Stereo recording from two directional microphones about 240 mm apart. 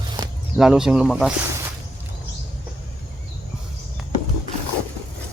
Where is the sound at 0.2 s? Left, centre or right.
Centre.